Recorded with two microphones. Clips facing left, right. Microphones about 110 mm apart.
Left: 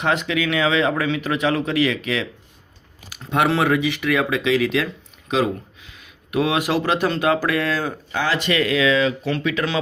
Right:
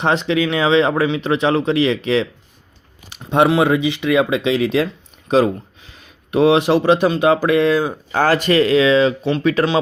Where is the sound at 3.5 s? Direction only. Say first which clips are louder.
Right 4 dB; 20° right (ahead or behind).